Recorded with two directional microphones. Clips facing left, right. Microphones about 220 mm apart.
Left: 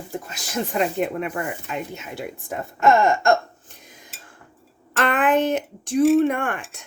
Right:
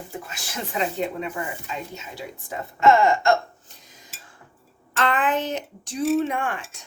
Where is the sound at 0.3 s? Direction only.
50° left (ahead or behind).